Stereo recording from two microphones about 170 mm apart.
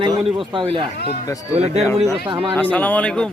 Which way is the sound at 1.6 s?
40° right (ahead or behind).